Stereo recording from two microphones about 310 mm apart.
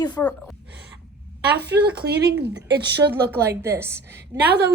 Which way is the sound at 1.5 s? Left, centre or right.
Right.